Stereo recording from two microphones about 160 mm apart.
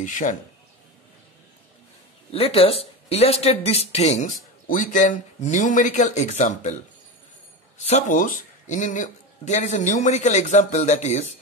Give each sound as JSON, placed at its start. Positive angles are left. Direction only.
{"t": 0.0, "sound": "speech", "side_deg": 55}
{"t": 2.3, "sound": "speech", "side_deg": 40}
{"t": 7.8, "sound": "speech", "side_deg": 50}